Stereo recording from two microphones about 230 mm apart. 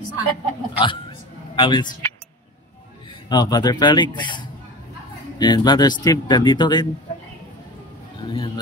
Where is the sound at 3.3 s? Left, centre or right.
Centre.